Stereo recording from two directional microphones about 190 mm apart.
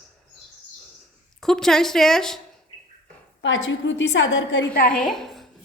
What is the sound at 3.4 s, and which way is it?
A woman's voice, 85° left.